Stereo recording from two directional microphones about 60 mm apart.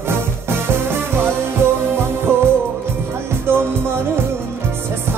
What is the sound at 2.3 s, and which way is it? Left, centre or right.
Music, right.